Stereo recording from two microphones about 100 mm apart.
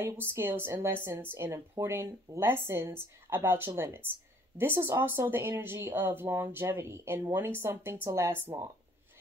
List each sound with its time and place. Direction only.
0.0 s speech: 25° right (ahead or behind)